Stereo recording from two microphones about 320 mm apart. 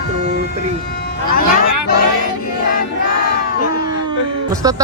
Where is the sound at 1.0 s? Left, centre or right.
Left.